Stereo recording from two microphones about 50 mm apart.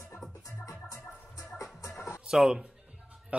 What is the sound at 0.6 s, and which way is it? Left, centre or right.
Music, left.